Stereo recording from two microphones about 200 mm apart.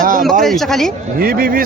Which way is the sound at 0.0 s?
45° right (ahead or behind).